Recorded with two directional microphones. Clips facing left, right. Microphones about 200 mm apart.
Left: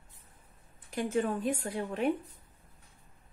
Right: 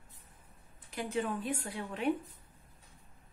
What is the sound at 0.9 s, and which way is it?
A woman's voice, 45° left (ahead or behind).